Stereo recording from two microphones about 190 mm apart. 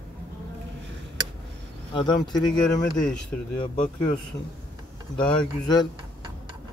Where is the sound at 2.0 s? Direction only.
20° left (ahead or behind).